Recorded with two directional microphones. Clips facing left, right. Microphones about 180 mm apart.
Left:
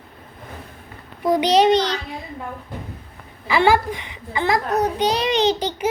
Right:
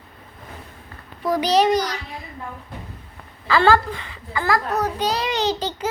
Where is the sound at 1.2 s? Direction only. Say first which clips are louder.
Left 2 dB; 20° left (ahead or behind).